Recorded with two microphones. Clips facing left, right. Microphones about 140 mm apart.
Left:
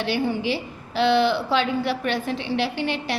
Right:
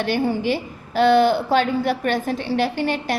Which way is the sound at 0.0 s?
50° right (ahead or behind).